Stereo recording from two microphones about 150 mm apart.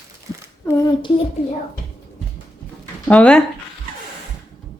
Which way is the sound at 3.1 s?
10° left (ahead or behind).